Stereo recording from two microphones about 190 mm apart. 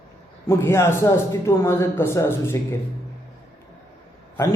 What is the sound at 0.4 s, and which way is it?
Speech, 15° left (ahead or behind).